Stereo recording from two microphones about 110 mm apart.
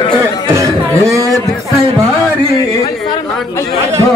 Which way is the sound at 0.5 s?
30° right (ahead or behind).